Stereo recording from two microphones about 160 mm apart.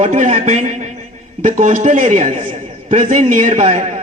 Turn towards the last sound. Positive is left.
turn(degrees=-45)  # may be behind; listen again after turning